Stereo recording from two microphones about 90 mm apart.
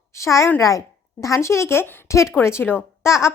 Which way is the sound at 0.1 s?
35° left (ahead or behind).